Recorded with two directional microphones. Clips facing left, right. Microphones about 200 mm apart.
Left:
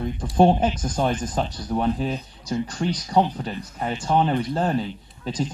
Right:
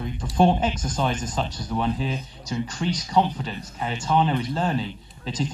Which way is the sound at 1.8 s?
45° left (ahead or behind).